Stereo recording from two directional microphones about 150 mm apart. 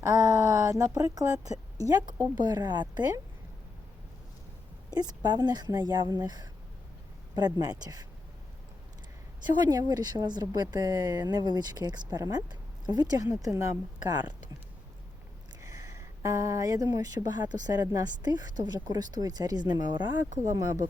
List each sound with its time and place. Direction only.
0.0 s a sound: 20° right (ahead or behind)
0.9 s speech: 20° right (ahead or behind)
4.9 s speech: 25° right (ahead or behind)
9.6 s speech: 25° right (ahead or behind)
15.6 s speech: 20° right (ahead or behind)